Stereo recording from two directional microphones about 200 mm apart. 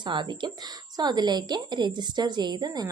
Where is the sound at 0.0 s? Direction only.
25° right (ahead or behind).